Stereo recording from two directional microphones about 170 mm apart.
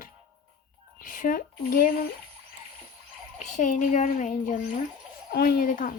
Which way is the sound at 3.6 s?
50° left (ahead or behind).